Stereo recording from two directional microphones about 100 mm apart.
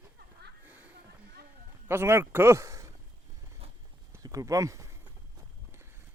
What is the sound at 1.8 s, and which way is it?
Speech, 25° right (ahead or behind).